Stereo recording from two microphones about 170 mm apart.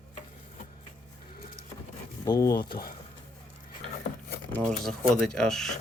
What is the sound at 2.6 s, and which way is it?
Speech, 65° left (ahead or behind).